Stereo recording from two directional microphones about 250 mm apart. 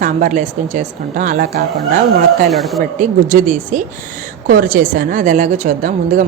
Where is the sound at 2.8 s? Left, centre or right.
Right.